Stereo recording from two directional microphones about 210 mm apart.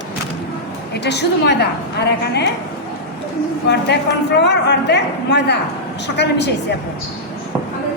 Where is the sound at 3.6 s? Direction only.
55° left (ahead or behind).